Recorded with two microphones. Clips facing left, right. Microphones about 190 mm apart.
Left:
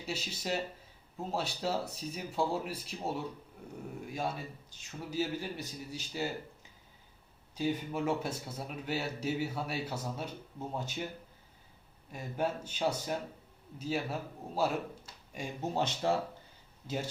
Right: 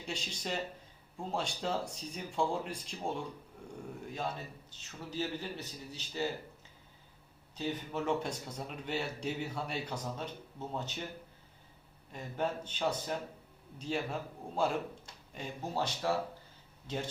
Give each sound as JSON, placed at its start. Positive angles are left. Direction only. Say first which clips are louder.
{"t": 0.0, "sound": "speech", "louder": "left 2 dB", "side_deg": 5}
{"t": 7.5, "sound": "speech", "louder": "left 3 dB", "side_deg": 10}
{"t": 12.1, "sound": "a man's voice", "louder": "left 1 dB", "side_deg": 10}
{"t": 15.7, "sound": "speech", "louder": "left 2 dB", "side_deg": 25}
{"t": 16.8, "sound": "speech", "louder": "left 1 dB", "side_deg": 5}